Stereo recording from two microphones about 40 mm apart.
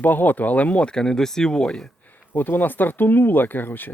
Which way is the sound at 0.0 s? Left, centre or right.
Left.